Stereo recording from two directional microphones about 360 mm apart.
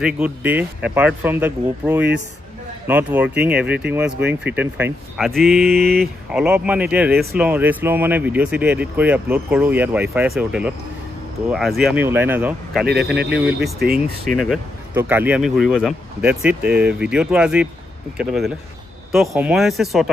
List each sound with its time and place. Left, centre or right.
0.0 s speech: centre
5.6 s speech: right
5.9 s speech: centre
12.8 s speech: right
13.9 s speech: centre